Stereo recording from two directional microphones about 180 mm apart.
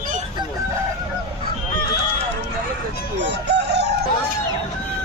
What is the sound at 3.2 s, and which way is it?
Chicken, 75° right (ahead or behind).